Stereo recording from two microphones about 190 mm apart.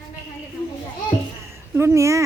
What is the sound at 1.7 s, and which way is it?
Speech, 15° right (ahead or behind).